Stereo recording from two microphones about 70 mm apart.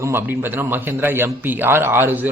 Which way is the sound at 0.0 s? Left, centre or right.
Right.